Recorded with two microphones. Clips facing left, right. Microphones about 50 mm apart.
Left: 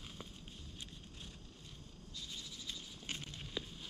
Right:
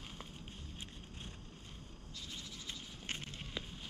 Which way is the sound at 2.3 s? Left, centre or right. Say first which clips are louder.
Right 2 dB; right.